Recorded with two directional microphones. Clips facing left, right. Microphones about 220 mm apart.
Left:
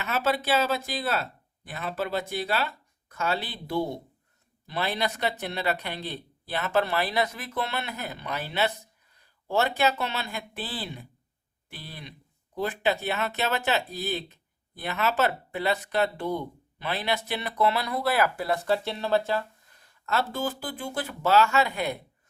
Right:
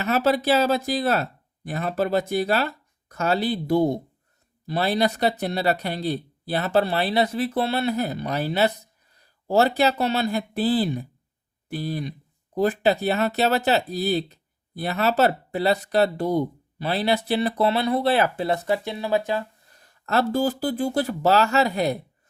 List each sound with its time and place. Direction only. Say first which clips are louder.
0.0 s speech: right 6 dB; 40° right (ahead or behind); by 19.5 s 15° right (ahead or behind)
20.1 s speech: right 7 dB; 40° right (ahead or behind)